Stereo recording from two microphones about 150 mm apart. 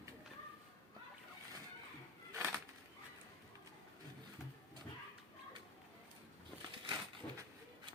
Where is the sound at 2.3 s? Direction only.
15° right (ahead or behind).